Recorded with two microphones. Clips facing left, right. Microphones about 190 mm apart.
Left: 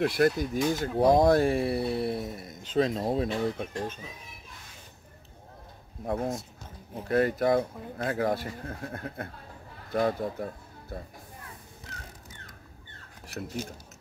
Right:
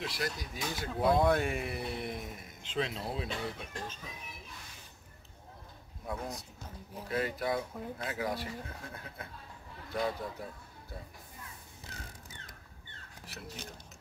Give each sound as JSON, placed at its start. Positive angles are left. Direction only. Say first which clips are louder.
{"t": 0.0, "sound": "speech", "louder": "left 13 dB", "side_deg": 55}
{"t": 0.9, "sound": "speech", "louder": "left 6 dB", "side_deg": 40}
{"t": 6.0, "sound": "speech", "louder": "left 9 dB", "side_deg": 50}